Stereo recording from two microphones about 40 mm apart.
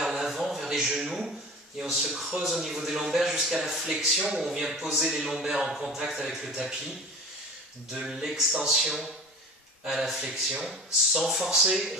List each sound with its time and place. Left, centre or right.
0.0 s a sound: centre
1.8 s a man's voice: centre
7.9 s a man's voice: centre
10.2 s speech: right
10.7 s a man's voice: centre